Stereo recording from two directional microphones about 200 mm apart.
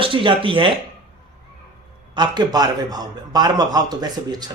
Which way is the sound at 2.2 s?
20° right (ahead or behind).